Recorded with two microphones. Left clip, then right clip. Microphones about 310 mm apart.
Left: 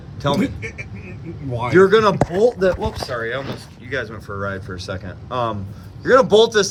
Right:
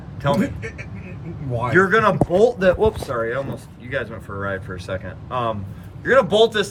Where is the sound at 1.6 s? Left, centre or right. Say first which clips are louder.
Left 3 dB; centre.